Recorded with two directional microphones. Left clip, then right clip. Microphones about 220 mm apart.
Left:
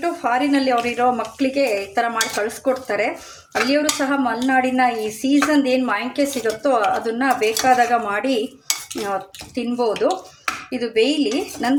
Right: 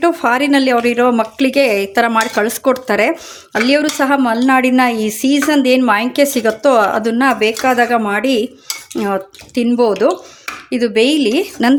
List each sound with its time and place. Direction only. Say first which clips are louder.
0.0 s speech: right 7 dB; 45° right (ahead or behind)
9.6 s speech: right 7 dB; 40° right (ahead or behind)